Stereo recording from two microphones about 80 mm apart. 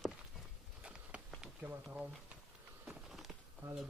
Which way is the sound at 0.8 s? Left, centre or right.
Centre.